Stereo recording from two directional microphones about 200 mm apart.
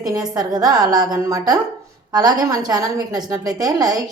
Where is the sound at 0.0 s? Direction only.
20° right (ahead or behind).